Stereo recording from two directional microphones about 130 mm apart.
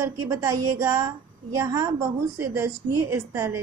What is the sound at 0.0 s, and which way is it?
A woman's voice, 25° right (ahead or behind).